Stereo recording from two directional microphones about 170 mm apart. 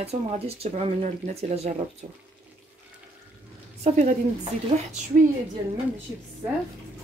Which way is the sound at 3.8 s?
40° right (ahead or behind).